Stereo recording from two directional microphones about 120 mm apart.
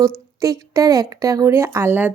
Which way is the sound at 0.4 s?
30° right (ahead or behind).